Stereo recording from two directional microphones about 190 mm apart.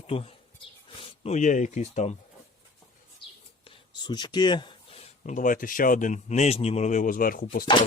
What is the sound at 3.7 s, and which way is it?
Speech, 25° left (ahead or behind).